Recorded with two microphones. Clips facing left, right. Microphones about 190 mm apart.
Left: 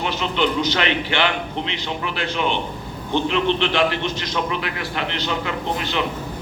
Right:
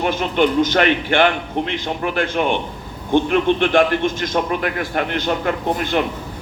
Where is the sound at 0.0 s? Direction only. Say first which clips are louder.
Right 4 dB; 50° right (ahead or behind).